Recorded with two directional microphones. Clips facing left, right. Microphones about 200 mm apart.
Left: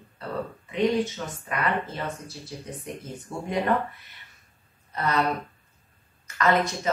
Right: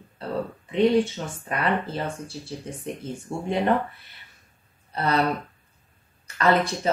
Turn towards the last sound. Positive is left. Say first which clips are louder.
# right 2 dB
turn(degrees=-30)  # may be behind; listen again after turning